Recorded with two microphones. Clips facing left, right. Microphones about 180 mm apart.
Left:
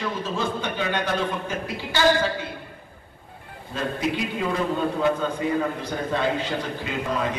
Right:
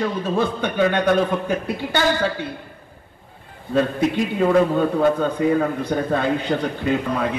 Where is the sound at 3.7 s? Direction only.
50° right (ahead or behind).